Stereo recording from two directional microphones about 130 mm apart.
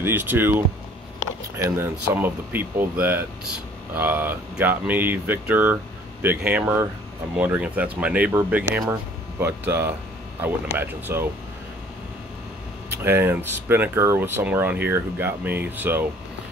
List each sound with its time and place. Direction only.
0.0 s speech: 15° right (ahead or behind)
1.6 s speech: 15° right (ahead or behind)
13.0 s speech: 15° right (ahead or behind)